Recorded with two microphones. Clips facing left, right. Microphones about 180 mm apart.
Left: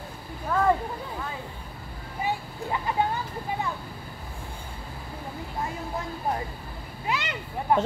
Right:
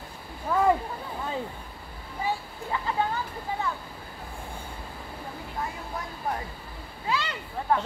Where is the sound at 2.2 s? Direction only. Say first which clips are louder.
Left 1 dB; 20° left (ahead or behind).